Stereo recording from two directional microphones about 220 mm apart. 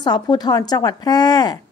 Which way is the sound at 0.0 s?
20° left (ahead or behind).